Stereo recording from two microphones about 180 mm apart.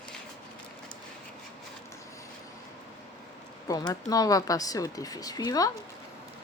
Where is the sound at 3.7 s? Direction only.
20° left (ahead or behind).